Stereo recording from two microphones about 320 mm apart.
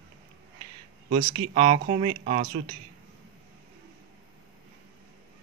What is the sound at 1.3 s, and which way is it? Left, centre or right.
Speech, centre.